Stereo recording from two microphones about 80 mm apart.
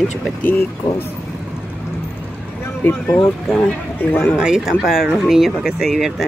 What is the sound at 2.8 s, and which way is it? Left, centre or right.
Speech, left.